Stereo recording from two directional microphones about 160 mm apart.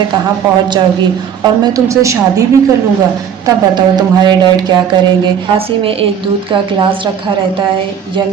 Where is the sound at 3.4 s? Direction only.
25° right (ahead or behind).